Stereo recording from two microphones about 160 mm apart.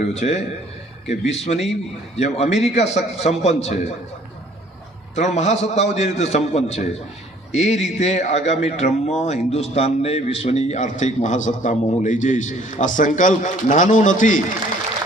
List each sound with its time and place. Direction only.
0.1 s a man's voice: 45° left (ahead or behind)
5.1 s a man's voice: 45° left (ahead or behind)